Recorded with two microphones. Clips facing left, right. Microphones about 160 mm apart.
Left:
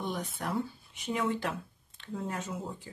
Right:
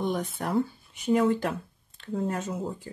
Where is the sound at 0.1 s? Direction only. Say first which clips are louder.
Right 6 dB; 50° right (ahead or behind).